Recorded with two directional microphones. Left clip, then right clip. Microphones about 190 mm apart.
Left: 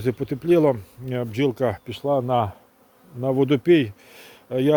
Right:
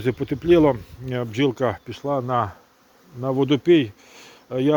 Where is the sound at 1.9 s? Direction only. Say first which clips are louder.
Left 2 dB; 25° left (ahead or behind).